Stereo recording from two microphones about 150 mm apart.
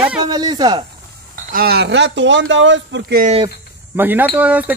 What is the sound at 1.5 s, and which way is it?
Speech, 90° right.